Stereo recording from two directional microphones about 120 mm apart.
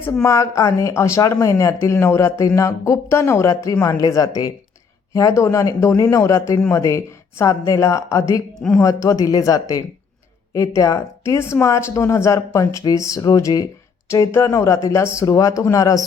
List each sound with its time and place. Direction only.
0.1 s speech: 25° left (ahead or behind)
8.5 s speech: 5° left (ahead or behind)
8.8 s speech: 30° left (ahead or behind)